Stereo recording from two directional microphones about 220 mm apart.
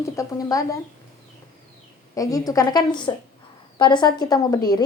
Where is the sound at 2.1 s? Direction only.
15° left (ahead or behind).